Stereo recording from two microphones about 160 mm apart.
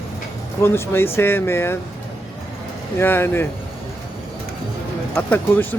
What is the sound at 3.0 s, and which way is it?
Speech, 15° left (ahead or behind).